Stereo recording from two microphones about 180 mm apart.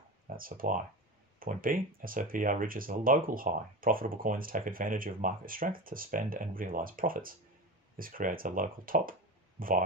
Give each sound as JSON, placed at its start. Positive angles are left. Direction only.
{"t": 0.4, "sound": "speech", "side_deg": -50}